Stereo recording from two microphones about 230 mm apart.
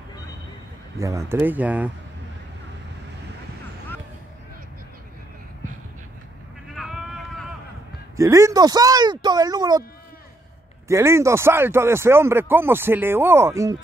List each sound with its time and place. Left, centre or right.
0.9 s speech: centre
6.7 s a sound: centre
8.2 s speech: centre
10.9 s speech: centre